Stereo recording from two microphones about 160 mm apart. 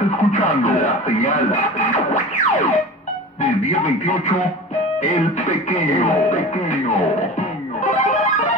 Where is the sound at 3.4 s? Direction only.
50° left (ahead or behind).